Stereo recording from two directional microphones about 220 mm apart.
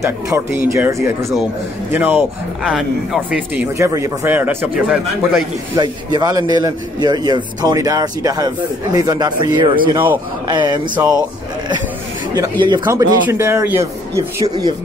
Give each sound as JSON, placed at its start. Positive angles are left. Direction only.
{"t": 0.0, "sound": "a man's voice", "side_deg": -15}
{"t": 5.8, "sound": "a man's voice", "side_deg": -20}
{"t": 12.4, "sound": "a man's voice", "side_deg": -20}